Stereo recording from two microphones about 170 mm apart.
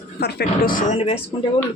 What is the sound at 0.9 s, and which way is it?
Speech, 35° left (ahead or behind).